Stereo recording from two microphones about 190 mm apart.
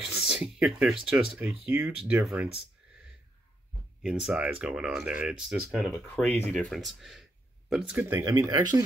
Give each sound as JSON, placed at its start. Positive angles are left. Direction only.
{"t": 0.0, "sound": "speech", "side_deg": -5}
{"t": 4.0, "sound": "speech", "side_deg": -5}